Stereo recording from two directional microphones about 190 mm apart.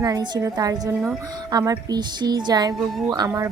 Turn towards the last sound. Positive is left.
turn(degrees=-15)  # may be behind; listen again after turning